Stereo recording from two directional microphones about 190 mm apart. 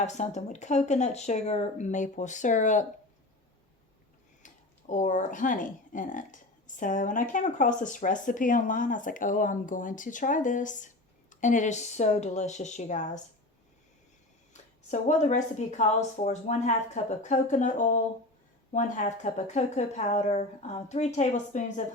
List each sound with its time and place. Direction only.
0.0 s speech: 35° left (ahead or behind)
4.4 s speech: 40° left (ahead or behind)
14.5 s speech: 40° left (ahead or behind)